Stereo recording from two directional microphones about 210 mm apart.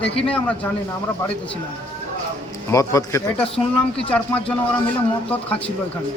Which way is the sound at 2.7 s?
15° left (ahead or behind).